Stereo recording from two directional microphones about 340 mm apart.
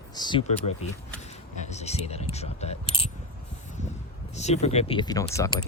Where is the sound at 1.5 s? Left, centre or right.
Centre.